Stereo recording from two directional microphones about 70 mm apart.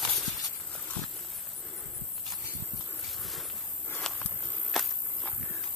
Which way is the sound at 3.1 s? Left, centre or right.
Centre.